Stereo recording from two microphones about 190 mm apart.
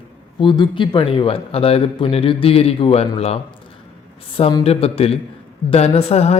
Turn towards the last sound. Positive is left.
turn(degrees=35)  # may be behind; listen again after turning